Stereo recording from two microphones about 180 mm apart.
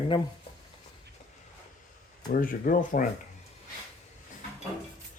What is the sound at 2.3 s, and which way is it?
Speech, 50° left (ahead or behind).